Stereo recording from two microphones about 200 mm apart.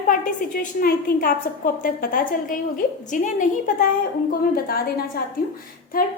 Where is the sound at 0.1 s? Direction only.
45° left (ahead or behind).